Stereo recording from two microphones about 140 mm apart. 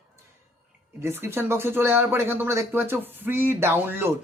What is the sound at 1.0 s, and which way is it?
Speech, 15° right (ahead or behind).